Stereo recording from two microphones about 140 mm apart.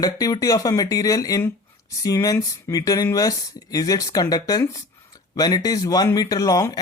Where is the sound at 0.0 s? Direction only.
25° left (ahead or behind).